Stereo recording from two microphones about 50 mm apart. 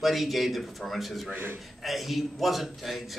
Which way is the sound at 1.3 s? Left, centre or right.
Right.